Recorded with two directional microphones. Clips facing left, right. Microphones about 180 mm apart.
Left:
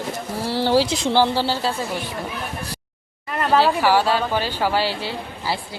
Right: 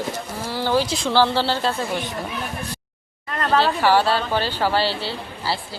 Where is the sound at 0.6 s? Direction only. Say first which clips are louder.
Left 2 dB; 30° left (ahead or behind); by 1.7 s 10° left (ahead or behind).